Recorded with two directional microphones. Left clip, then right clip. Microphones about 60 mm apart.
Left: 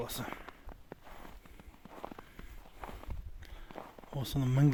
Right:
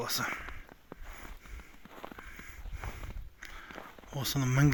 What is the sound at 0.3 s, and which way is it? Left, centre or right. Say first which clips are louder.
Speech: right 7 dB; left.